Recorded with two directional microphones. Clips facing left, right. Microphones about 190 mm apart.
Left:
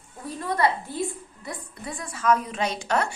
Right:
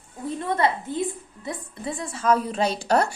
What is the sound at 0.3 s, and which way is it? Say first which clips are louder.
A woman's voice: even; 25° right (ahead or behind).